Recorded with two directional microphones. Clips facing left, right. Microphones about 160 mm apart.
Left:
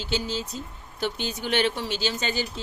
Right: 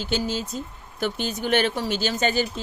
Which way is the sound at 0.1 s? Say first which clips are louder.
Right 2 dB; 50° right (ahead or behind).